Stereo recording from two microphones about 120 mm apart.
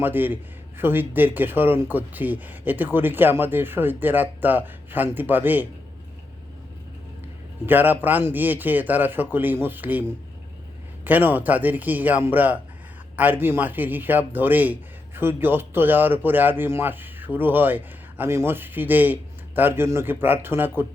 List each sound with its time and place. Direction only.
0.0 s a man's voice: 15° right (ahead or behind)
7.7 s a man's voice: 15° right (ahead or behind)